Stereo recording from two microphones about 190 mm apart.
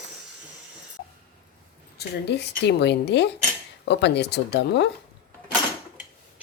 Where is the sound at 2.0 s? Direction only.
60° left (ahead or behind).